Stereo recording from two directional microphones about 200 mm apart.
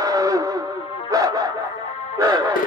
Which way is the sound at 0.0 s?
15° right (ahead or behind).